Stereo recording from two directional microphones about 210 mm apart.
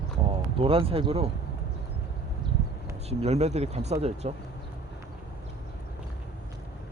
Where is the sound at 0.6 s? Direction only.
25° right (ahead or behind).